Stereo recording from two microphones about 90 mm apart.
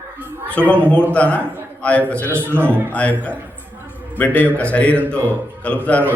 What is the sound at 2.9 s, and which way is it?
Speech, 15° left (ahead or behind).